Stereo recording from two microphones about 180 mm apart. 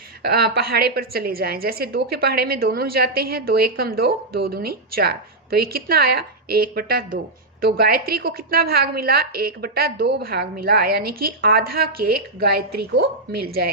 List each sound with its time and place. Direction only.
0.2 s a woman's voice: 60° right (ahead or behind)